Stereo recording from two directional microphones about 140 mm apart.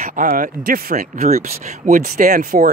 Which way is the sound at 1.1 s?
55° right (ahead or behind).